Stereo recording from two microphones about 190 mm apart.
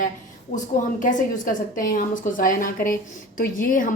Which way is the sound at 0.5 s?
40° left (ahead or behind).